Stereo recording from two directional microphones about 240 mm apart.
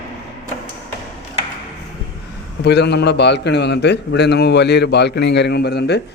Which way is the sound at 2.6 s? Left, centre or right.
Left.